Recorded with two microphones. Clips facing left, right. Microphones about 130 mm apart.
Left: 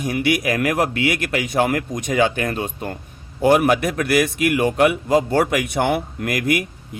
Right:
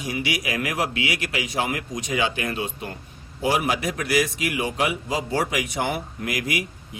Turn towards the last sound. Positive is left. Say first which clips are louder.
# left 7 dB
turn(degrees=55)  # may be behind; listen again after turning